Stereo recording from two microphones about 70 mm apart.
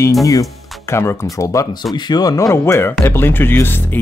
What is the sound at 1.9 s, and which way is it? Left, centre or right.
Speech, left.